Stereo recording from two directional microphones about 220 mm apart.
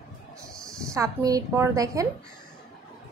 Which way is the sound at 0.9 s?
15° right (ahead or behind).